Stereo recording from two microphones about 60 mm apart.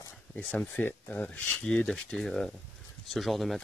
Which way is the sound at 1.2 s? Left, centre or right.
Centre.